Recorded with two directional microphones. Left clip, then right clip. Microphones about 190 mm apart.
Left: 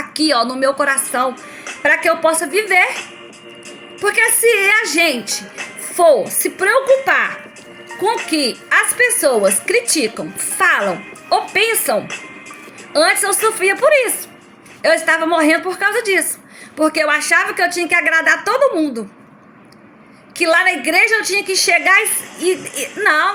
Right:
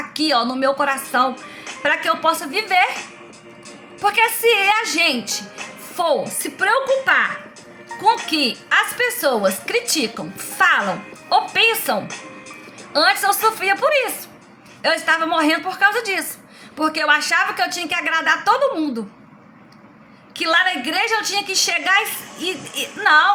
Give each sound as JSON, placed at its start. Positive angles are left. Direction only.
{"t": 0.1, "sound": "a woman's voice", "side_deg": -10}
{"t": 4.0, "sound": "a woman's voice", "side_deg": -5}
{"t": 8.1, "sound": "speech", "side_deg": 15}
{"t": 8.7, "sound": "a woman's voice", "side_deg": -10}
{"t": 20.4, "sound": "a woman's voice", "side_deg": -10}
{"t": 23.0, "sound": "a woman's voice", "side_deg": -5}